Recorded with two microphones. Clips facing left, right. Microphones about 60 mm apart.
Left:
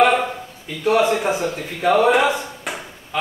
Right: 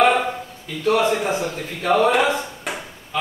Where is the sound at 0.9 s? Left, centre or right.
Centre.